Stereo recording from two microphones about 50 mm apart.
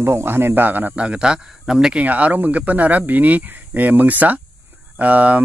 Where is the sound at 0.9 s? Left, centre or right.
Right.